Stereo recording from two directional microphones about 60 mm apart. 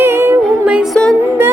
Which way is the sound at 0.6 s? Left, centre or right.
Centre.